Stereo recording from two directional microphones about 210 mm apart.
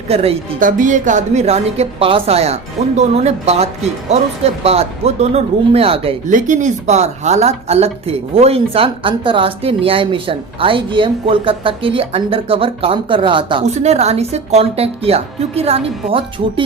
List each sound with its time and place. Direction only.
0.1 s speech: 30° right (ahead or behind)